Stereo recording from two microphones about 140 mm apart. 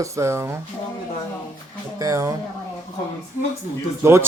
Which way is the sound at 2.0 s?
25° right (ahead or behind).